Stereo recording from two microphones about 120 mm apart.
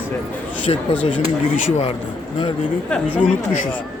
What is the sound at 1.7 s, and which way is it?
Speech, 55° left (ahead or behind).